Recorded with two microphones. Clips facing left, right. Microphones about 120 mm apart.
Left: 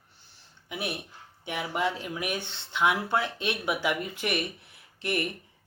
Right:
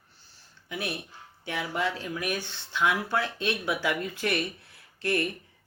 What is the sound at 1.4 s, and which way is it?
Speech, 20° left (ahead or behind).